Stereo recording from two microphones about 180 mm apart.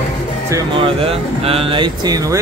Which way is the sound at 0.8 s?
30° right (ahead or behind).